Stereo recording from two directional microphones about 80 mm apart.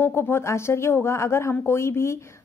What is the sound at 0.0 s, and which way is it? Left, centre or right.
A woman's voice, left.